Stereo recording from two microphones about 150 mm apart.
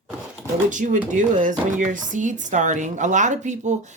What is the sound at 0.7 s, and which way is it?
Speech, 55° right (ahead or behind).